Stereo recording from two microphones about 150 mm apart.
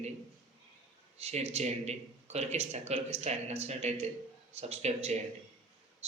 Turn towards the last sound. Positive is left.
turn(degrees=-45)  # may be behind; listen again after turning